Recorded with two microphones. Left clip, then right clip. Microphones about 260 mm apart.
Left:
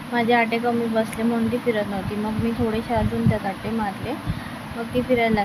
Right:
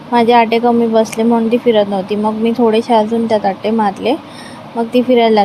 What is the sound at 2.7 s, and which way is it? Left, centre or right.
Speech, right.